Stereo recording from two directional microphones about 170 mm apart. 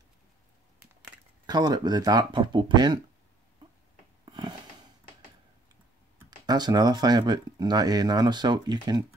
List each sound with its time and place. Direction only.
1.4 s speech: 25° right (ahead or behind)
4.3 s a sound: 25° right (ahead or behind)
6.4 s speech: 25° right (ahead or behind)